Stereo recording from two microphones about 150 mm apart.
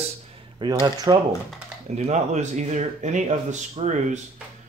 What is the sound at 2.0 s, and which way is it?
Speech, 50° right (ahead or behind).